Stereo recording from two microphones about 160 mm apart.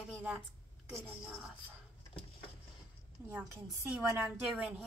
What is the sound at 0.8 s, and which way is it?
Speech, centre (ahead or behind).